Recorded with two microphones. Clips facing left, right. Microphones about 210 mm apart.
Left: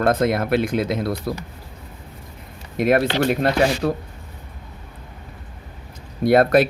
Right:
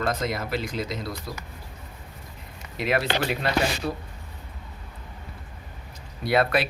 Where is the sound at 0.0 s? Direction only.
60° left (ahead or behind).